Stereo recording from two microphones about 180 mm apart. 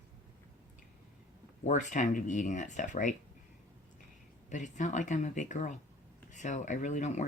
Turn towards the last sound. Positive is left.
turn(degrees=40)  # may be behind; listen again after turning